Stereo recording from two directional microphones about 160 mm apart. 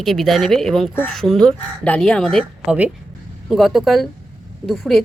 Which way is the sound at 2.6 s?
5° right (ahead or behind).